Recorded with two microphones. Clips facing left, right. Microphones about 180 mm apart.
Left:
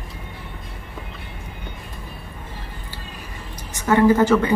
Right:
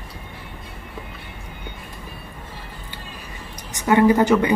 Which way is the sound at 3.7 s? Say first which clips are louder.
Even; 15° right (ahead or behind).